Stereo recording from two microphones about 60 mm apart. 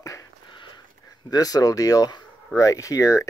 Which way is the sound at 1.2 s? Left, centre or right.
Left.